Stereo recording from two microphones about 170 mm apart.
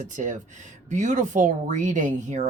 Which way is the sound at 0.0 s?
45° right (ahead or behind).